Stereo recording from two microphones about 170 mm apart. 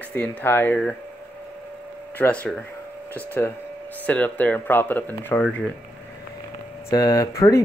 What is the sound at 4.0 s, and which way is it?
Speech, 10° left (ahead or behind).